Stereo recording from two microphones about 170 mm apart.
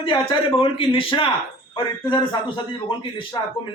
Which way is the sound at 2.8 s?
30° left (ahead or behind).